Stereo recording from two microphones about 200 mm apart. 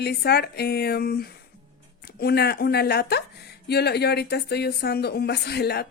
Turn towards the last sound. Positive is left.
turn(degrees=55)  # may be behind; listen again after turning